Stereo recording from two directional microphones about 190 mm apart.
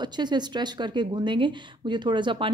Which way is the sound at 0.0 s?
25° right (ahead or behind).